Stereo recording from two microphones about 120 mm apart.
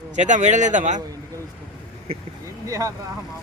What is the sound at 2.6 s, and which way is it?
Speech, 25° right (ahead or behind).